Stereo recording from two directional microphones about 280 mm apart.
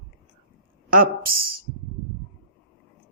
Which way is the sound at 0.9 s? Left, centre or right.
Right.